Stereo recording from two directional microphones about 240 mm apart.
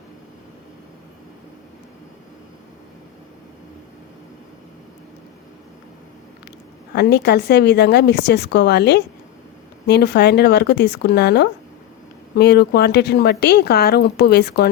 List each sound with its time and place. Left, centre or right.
6.9 s a woman's voice: left